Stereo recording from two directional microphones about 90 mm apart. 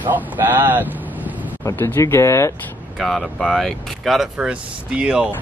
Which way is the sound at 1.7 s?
25° left (ahead or behind).